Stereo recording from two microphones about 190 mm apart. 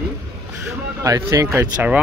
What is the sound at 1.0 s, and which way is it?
Speech, 20° right (ahead or behind).